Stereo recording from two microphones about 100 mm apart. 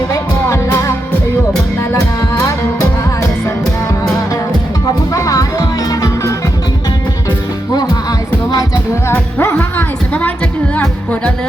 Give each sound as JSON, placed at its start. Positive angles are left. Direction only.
{"t": 0.1, "sound": "music", "side_deg": 30}
{"t": 5.1, "sound": "music", "side_deg": 30}
{"t": 9.0, "sound": "music", "side_deg": 20}